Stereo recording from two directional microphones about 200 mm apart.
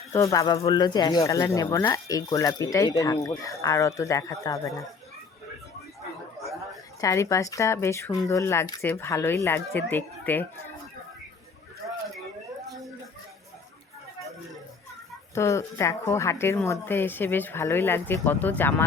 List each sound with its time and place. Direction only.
0.1 s speech: 15° left (ahead or behind)
7.0 s speech: 15° left (ahead or behind)
15.4 s speech: 15° left (ahead or behind)